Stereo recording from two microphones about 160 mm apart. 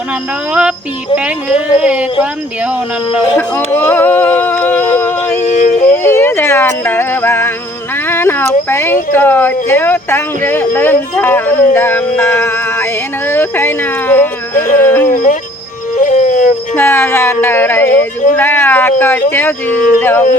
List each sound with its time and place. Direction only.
1.1 s speech: 5° right (ahead or behind)
3.7 s music: 15° left (ahead or behind)
4.9 s a sound: 15° left (ahead or behind)
5.4 s yodeling: 50° left (ahead or behind)
5.8 s a sound: 15° left (ahead or behind)
9.1 s speech: 15° left (ahead or behind)
15.0 s speech: 60° left (ahead or behind)
16.0 s music: 50° left (ahead or behind)
16.7 s speech: 15° left (ahead or behind)